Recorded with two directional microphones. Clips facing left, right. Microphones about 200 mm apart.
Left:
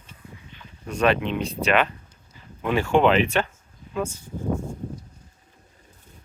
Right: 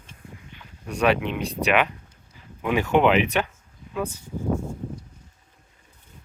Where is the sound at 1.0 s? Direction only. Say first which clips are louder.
Even; 10° right (ahead or behind).